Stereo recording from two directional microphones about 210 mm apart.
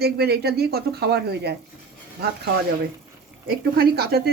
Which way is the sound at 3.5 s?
50° right (ahead or behind).